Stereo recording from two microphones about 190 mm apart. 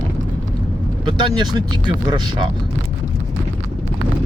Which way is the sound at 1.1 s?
25° right (ahead or behind).